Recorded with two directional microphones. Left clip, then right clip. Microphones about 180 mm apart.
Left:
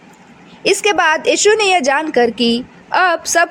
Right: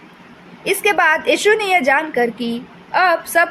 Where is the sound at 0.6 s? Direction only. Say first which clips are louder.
Left 2 dB; 40° left (ahead or behind).